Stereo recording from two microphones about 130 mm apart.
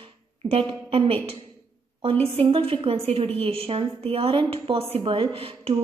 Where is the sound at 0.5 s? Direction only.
45° right (ahead or behind).